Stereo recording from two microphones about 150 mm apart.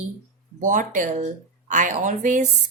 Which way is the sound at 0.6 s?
60° right (ahead or behind).